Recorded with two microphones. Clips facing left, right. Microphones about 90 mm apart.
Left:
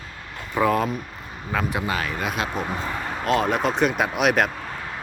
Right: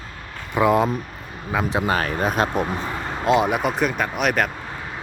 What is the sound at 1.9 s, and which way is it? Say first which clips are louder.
Speech: right 5 dB; 40° right (ahead or behind).